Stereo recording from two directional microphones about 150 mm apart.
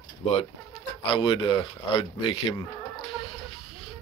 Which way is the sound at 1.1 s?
35° left (ahead or behind).